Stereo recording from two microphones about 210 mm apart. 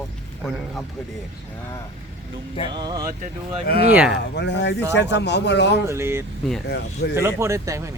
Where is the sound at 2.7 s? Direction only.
20° right (ahead or behind).